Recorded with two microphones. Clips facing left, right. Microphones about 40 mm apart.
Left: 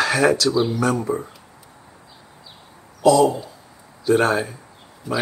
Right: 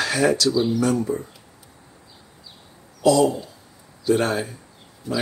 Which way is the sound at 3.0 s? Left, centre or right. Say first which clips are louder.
Left 2 dB; centre.